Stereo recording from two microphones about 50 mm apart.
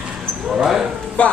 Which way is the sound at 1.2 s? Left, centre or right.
Left.